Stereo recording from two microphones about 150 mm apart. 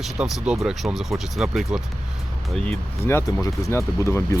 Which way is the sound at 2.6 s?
10° left (ahead or behind).